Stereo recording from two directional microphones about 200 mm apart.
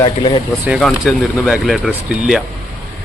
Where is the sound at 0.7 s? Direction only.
Centre (ahead or behind).